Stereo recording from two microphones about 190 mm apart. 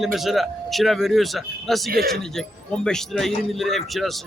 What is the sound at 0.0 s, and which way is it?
A man's voice, centre (ahead or behind).